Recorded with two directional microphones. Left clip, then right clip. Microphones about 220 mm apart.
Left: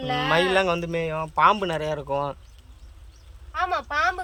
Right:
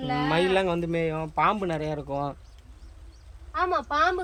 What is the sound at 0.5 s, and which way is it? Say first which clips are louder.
Speech: left 3 dB; 5° left (ahead or behind).